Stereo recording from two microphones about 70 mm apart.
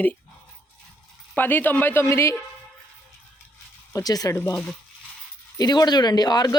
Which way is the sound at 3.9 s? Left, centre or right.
Left.